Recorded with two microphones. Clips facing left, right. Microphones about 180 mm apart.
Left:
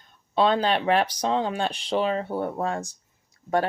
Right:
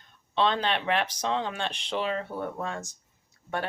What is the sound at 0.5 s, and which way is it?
Speech, 35° left (ahead or behind).